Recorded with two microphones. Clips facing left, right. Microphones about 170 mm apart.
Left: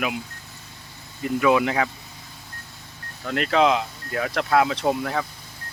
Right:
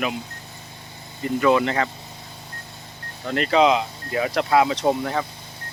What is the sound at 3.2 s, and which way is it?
Speech, centre (ahead or behind).